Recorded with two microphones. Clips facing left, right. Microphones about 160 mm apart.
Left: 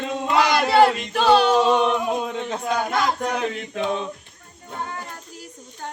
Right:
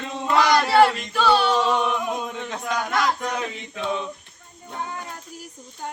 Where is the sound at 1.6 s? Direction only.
20° left (ahead or behind).